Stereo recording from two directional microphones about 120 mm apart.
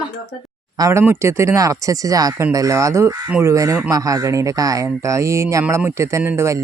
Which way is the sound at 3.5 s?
30° right (ahead or behind).